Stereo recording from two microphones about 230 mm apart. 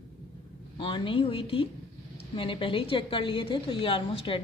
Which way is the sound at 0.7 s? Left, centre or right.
Left.